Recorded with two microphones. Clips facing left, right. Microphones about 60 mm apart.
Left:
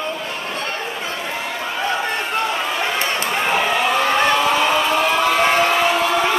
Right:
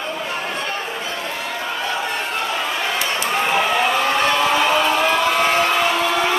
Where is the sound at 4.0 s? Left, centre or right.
Left.